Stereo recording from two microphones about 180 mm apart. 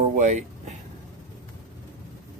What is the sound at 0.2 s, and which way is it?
Speech, 40° right (ahead or behind).